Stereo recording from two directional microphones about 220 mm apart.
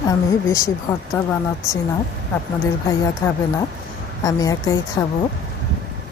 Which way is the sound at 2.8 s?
10° left (ahead or behind).